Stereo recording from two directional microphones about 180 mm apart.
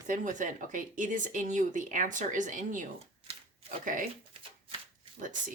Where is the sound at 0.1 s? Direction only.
45° right (ahead or behind).